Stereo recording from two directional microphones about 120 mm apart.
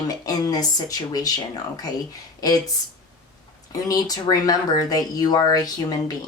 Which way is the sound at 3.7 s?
30° left (ahead or behind).